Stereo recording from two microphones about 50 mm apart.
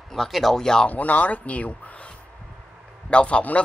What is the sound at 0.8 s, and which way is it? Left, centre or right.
Speech, left.